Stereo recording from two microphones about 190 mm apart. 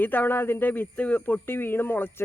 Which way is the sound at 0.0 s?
10° left (ahead or behind).